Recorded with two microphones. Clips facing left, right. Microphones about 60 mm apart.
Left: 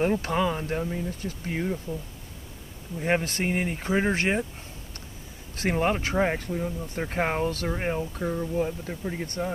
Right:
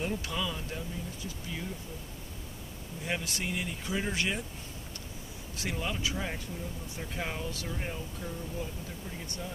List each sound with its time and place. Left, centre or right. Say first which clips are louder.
0.0 s speech: left 10 dB; left
3.0 s speech: left 9 dB; left
5.6 s speech: left 10 dB; left